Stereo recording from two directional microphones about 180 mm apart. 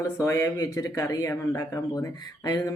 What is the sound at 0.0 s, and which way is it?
Speech, 15° left (ahead or behind).